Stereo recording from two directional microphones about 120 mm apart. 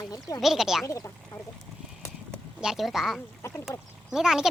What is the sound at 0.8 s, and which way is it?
Speech, 25° left (ahead or behind).